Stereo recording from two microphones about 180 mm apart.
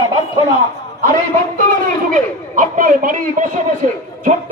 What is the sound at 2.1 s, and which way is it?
A woman's voice, 45° right (ahead or behind).